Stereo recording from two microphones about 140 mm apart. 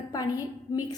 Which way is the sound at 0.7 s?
25° left (ahead or behind).